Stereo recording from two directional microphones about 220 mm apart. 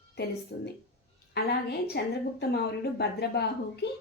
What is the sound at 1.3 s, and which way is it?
Speech, 45° left (ahead or behind).